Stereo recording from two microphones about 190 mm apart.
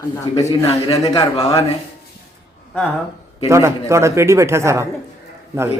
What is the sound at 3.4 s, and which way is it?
Speech, 15° right (ahead or behind).